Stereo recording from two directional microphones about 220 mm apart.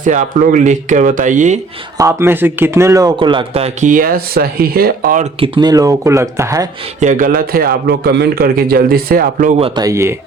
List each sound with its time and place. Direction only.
0.0 s speech: 35° right (ahead or behind)
2.0 s a man's voice: 15° right (ahead or behind); by 5.5 s 30° right (ahead or behind)
5.5 s speech: 15° right (ahead or behind)
7.0 s a man's voice: 35° right (ahead or behind)
9.6 s speech: 20° right (ahead or behind)